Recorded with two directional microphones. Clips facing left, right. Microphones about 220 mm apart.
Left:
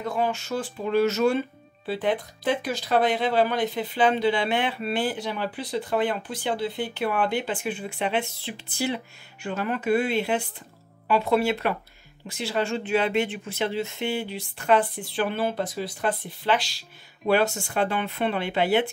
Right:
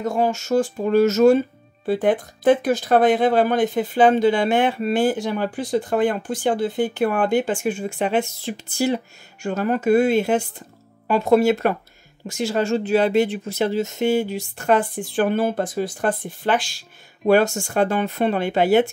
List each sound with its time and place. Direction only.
0.0 s speech: 45° right (ahead or behind)